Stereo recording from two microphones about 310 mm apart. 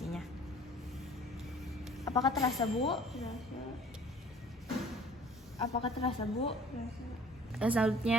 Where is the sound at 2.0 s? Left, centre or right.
Centre.